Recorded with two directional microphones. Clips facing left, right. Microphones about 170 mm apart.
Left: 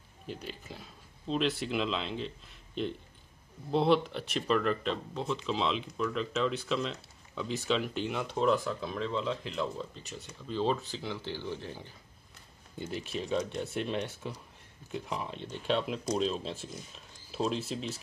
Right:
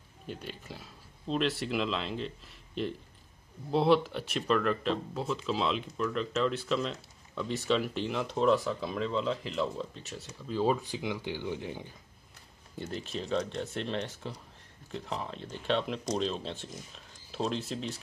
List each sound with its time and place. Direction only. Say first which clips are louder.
0.3 s speech: even; centre (ahead or behind)
12.7 s speech: even; 5° left (ahead or behind)
15.0 s speech: right 2 dB; 30° right (ahead or behind)
15.4 s speech: even; centre (ahead or behind)